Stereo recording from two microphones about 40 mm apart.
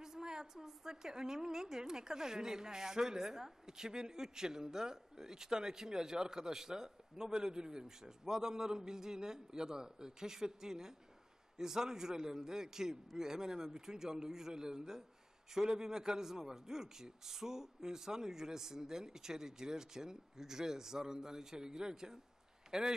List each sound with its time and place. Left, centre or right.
0.0 s a woman's voice: centre